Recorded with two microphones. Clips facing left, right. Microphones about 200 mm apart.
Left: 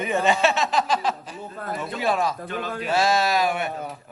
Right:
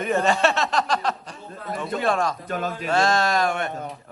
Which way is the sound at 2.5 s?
45° right (ahead or behind).